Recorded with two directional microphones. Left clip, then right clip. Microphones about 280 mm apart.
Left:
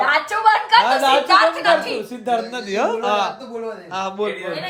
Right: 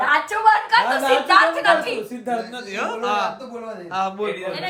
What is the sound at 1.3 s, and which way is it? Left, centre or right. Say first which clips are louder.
A woman's voice: right 2 dB; centre.